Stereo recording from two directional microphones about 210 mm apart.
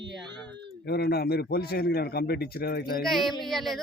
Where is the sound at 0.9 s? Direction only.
50° left (ahead or behind).